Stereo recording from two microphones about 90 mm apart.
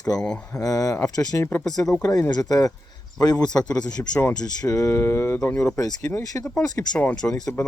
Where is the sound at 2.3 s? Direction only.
40° left (ahead or behind).